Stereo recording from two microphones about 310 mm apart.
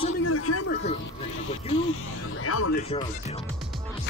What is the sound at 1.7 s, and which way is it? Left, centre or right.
Speech, left.